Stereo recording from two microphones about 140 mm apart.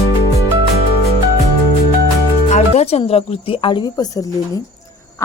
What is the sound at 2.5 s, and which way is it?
Music, 50° left (ahead or behind).